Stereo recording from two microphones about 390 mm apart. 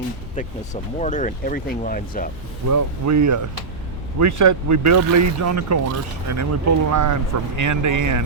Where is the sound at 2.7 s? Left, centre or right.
Right.